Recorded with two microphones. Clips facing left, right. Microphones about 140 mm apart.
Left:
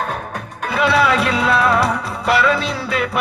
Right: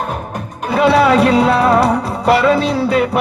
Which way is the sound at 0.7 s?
40° right (ahead or behind).